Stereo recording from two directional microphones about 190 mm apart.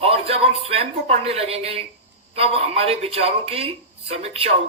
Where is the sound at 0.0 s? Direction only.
30° right (ahead or behind).